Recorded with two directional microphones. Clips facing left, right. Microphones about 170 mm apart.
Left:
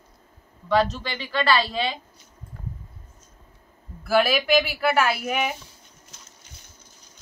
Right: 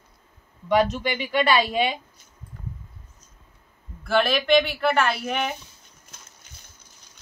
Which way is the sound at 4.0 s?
5° left (ahead or behind).